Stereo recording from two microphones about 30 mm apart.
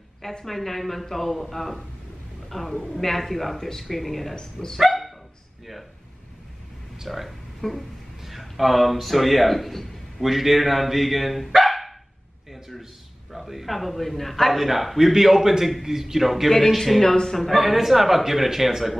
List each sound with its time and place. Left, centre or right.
0.5 s a man's voice: centre
4.4 s speech: left
4.7 s dog: centre
7.1 s speech: centre
8.2 s a sound: centre
9.0 s a man's voice: centre
13.3 s a man's voice: centre
16.7 s speech: centre
17.4 s a man's voice: centre